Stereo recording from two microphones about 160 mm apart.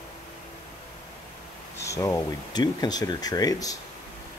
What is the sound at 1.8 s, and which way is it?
Speech, 20° left (ahead or behind).